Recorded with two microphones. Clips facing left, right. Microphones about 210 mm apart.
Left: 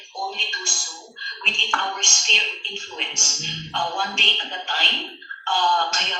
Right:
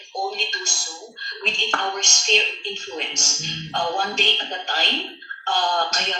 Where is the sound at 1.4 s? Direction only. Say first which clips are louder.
Right 3 dB; 40° right (ahead or behind).